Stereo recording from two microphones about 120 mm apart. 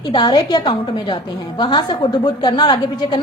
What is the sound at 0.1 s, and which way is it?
A woman's voice, 40° left (ahead or behind).